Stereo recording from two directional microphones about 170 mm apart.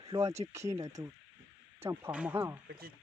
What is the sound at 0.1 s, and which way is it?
Speech, 20° right (ahead or behind).